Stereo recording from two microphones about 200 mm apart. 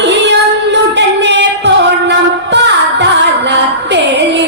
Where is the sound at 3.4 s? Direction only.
60° right (ahead or behind).